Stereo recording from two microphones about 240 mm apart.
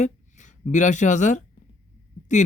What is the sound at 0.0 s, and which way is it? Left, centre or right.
Speech, left.